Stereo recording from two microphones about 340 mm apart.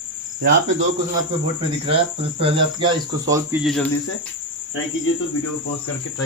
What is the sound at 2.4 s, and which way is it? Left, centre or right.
Speech, centre.